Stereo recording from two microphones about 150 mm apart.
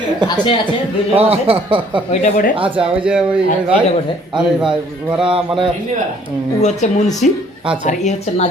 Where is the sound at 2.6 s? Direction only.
35° right (ahead or behind).